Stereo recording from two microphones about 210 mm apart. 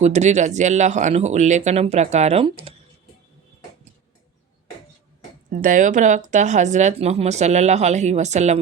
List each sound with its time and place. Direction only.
0.0 s speech: 35° right (ahead or behind)
5.5 s speech: 40° right (ahead or behind)